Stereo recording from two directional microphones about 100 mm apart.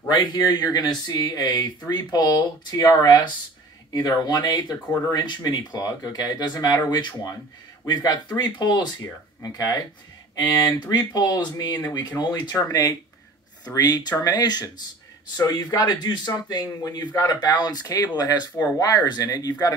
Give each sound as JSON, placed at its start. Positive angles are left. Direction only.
{"t": 0.1, "sound": "speech", "side_deg": 45}